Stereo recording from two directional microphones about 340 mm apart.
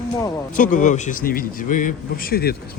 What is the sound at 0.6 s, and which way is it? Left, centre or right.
A man's voice, left.